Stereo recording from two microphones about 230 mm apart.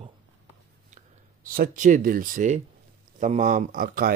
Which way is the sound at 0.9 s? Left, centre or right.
Right.